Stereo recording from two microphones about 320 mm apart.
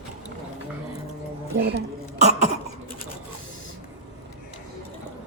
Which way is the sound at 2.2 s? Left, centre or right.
Centre.